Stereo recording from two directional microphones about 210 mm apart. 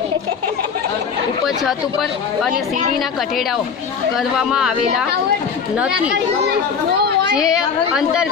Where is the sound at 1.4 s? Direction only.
Centre (ahead or behind).